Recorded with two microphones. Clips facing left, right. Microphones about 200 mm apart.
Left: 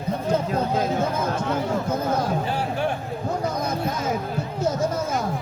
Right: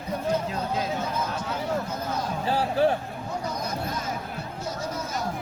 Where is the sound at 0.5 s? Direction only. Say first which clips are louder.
Left 6 dB; 50° left (ahead or behind).